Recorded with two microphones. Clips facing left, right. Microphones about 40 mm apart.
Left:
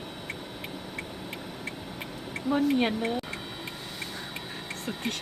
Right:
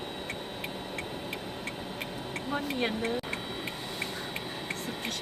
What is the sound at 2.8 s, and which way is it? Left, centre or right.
Speech, left.